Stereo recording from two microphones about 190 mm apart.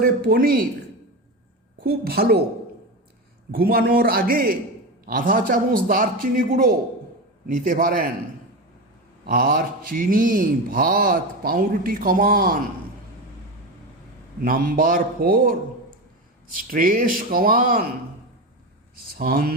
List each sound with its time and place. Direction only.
0.0 s speech: 50° right (ahead or behind)
1.8 s a woman's voice: 55° right (ahead or behind)
3.5 s speech: 50° right (ahead or behind)
9.2 s speech: 50° right (ahead or behind)
14.4 s speech: 50° right (ahead or behind)
16.6 s speech: 45° right (ahead or behind)
19.2 s speech: 50° right (ahead or behind)